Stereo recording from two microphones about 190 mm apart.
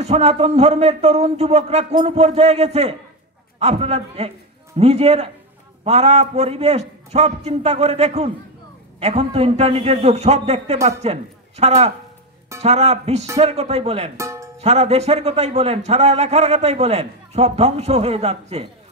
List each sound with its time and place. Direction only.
0.0 s a man's voice: 35° right (ahead or behind)
14.1 s music: 15° right (ahead or behind)
14.6 s a man's voice: 35° right (ahead or behind)